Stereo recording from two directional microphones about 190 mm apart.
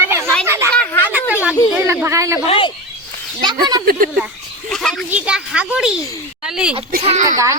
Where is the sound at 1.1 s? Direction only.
10° right (ahead or behind).